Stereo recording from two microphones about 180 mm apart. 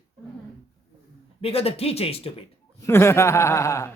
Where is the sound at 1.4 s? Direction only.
35° left (ahead or behind).